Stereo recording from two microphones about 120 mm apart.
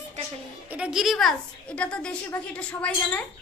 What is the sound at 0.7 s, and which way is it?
A woman's voice, 5° right (ahead or behind).